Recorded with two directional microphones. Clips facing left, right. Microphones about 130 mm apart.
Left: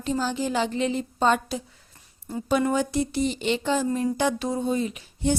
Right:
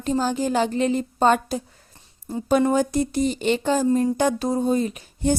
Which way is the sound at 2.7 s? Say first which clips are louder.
Right 3 dB; 45° right (ahead or behind).